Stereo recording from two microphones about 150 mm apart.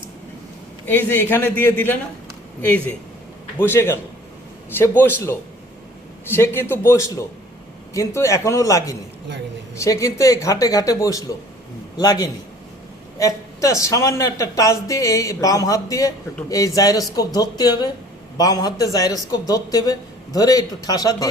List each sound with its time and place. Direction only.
0.9 s a man's voice: 15° left (ahead or behind)